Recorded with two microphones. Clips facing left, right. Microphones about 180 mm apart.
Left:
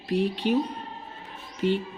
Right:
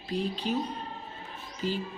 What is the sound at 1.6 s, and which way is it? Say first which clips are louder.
Speech: left 7 dB; 65° left (ahead or behind).